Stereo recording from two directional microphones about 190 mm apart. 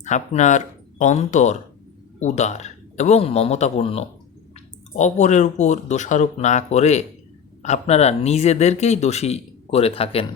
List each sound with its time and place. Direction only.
0.0 s speech: 40° left (ahead or behind)